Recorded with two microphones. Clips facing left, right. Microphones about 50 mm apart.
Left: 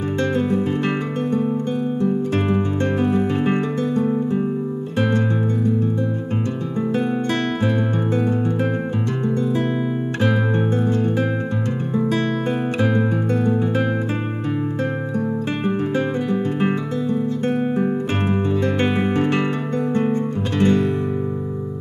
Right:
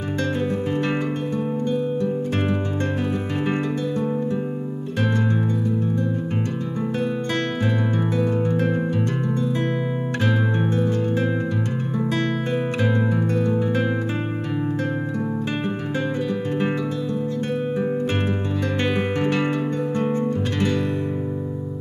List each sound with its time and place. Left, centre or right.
2.8 s music: left
10.7 s music: left
12.9 s music: left
16.3 s music: left
20.0 s music: left